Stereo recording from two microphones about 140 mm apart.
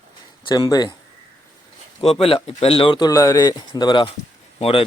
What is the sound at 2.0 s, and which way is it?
Speech, 45° left (ahead or behind).